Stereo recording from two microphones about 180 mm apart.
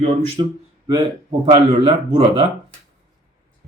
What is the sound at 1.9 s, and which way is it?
Speech, 30° right (ahead or behind).